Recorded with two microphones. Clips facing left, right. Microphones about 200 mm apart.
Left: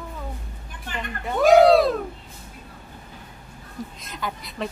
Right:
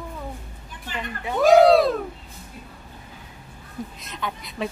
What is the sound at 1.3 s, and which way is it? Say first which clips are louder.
Speech: even; centre (ahead or behind).